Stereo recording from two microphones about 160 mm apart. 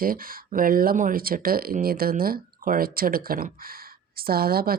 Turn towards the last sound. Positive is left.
turn(degrees=-70)  # may be behind; listen again after turning